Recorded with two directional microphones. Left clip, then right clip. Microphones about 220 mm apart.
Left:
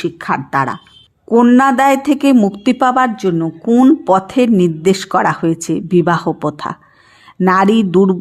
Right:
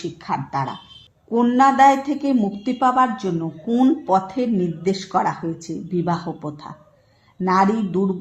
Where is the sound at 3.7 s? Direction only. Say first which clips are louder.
Left 9 dB; 25° left (ahead or behind).